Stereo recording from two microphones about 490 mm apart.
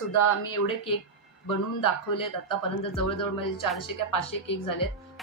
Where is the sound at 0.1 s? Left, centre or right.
Left.